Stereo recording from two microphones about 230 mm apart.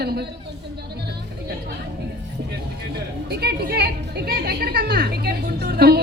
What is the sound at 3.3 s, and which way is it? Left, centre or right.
A woman's voice, right.